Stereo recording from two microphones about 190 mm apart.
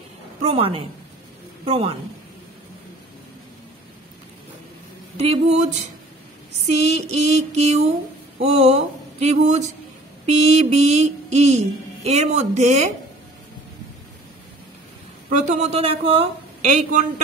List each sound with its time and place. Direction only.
0.4 s a woman's voice: 30° right (ahead or behind)
5.1 s speech: 35° right (ahead or behind)
6.7 s speech: 35° right (ahead or behind)
15.2 s speech: 40° right (ahead or behind)